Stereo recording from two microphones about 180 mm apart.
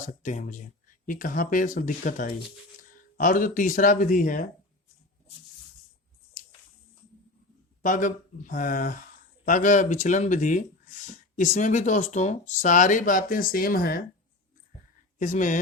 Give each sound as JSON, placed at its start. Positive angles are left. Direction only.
{"t": 0.0, "sound": "speech", "side_deg": 45}
{"t": 7.8, "sound": "speech", "side_deg": 50}
{"t": 15.2, "sound": "speech", "side_deg": 45}